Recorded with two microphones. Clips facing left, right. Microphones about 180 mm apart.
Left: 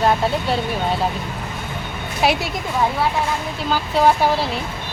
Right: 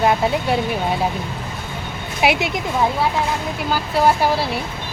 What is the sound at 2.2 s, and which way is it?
Speech, 15° right (ahead or behind).